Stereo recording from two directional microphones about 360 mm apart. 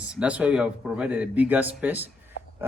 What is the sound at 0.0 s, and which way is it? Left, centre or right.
A man's voice, centre.